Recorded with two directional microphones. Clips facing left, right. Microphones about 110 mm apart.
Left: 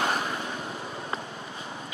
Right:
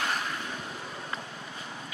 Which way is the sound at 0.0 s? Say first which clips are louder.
Left 4 dB; 20° left (ahead or behind).